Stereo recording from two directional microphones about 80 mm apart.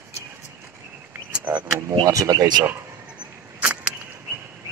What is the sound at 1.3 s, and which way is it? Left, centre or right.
Wild animals, right.